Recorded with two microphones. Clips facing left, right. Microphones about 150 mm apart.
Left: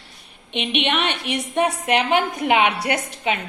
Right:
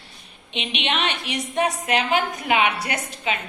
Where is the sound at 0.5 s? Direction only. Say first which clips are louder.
Left 4 dB; 55° left (ahead or behind).